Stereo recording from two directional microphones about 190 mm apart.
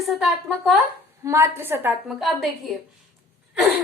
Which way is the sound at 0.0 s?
Centre (ahead or behind).